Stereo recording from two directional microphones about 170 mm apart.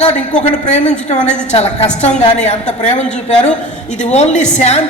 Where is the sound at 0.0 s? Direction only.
40° left (ahead or behind).